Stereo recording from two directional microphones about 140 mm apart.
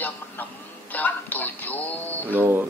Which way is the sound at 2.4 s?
15° right (ahead or behind).